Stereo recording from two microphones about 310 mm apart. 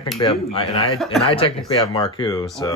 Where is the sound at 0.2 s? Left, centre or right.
Centre.